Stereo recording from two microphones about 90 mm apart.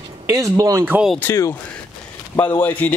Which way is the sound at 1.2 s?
35° left (ahead or behind).